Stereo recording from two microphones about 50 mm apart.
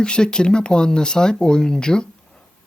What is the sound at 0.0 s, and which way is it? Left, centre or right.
Speech, centre.